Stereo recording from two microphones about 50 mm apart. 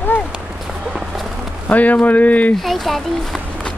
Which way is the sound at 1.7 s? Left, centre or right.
Left.